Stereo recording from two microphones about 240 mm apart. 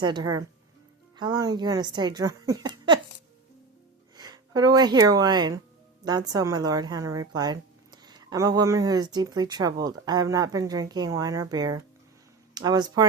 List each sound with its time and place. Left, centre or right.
0.0 s speech: centre
4.2 s speech: centre